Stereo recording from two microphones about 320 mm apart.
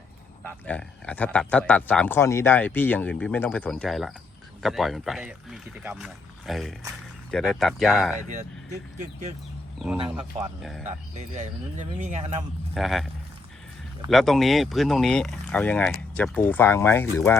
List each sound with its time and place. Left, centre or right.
0.7 s speech: centre
9.7 s speech: centre
11.3 s speech: right
12.7 s speech: centre
14.1 s speech: centre